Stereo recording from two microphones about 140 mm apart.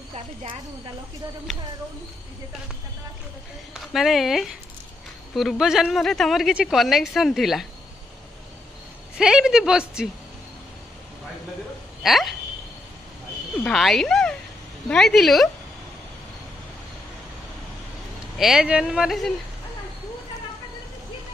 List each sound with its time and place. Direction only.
3.7 s a woman's voice: centre (ahead or behind)
9.2 s a woman's voice: 5° right (ahead or behind)
12.0 s a woman's voice: centre (ahead or behind)
13.7 s a woman's voice: centre (ahead or behind)
18.4 s a woman's voice: 5° right (ahead or behind)